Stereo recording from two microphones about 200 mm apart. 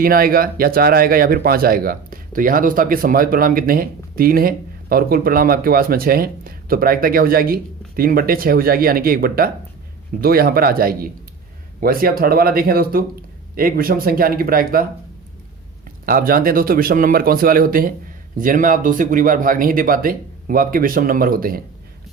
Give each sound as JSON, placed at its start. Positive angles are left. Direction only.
{"t": 0.0, "sound": "speech", "side_deg": -45}
{"t": 16.0, "sound": "speech", "side_deg": -45}